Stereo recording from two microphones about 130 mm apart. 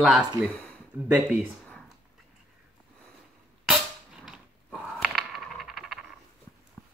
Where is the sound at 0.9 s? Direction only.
15° right (ahead or behind).